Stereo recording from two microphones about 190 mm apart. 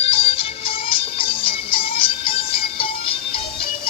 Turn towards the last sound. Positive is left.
turn(degrees=30)  # may be behind; listen again after turning